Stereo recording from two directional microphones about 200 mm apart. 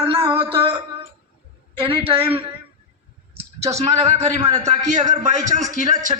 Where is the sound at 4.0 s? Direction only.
35° right (ahead or behind).